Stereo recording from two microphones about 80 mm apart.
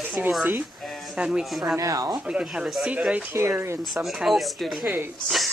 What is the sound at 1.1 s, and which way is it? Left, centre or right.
Speech, centre.